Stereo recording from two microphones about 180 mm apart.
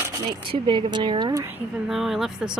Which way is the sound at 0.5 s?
25° right (ahead or behind).